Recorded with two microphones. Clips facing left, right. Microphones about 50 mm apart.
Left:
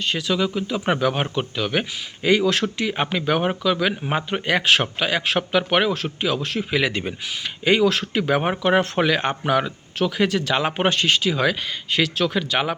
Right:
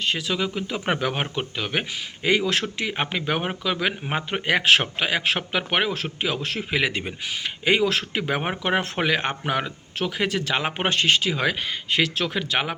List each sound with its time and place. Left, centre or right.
0.0 s a man's voice: right
9.0 s a man's voice: right
10.8 s a man's voice: right